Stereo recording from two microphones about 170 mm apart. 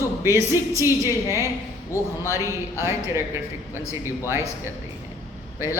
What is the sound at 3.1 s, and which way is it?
Speech, 15° right (ahead or behind).